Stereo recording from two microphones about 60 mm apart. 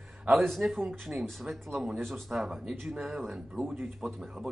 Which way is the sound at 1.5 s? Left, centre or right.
Centre.